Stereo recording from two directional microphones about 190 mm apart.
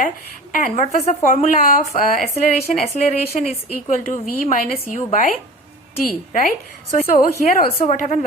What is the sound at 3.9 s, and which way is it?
A woman's voice, 45° left (ahead or behind).